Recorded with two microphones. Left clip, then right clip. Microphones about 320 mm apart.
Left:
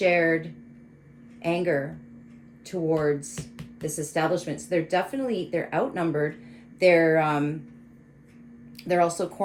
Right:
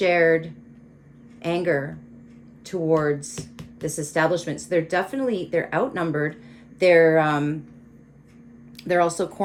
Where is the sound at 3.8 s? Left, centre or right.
Right.